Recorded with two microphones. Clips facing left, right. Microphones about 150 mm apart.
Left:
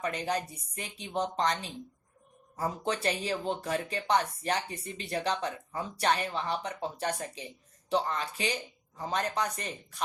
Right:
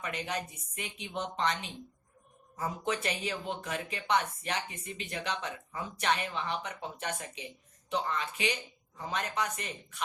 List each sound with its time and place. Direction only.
0.0 s speech: 35° left (ahead or behind)
2.6 s speech: 35° left (ahead or behind)